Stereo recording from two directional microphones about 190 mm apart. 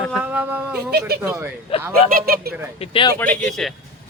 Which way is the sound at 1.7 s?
30° left (ahead or behind).